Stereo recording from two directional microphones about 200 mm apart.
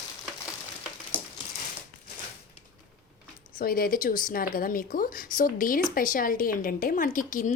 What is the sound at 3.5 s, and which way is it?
Speech, 45° left (ahead or behind).